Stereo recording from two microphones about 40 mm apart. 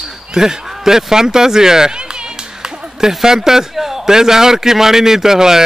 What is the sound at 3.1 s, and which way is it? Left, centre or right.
A man's voice, centre.